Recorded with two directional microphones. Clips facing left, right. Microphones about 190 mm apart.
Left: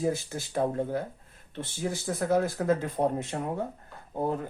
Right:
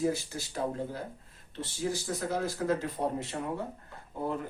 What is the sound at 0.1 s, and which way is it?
Speech, 50° left (ahead or behind).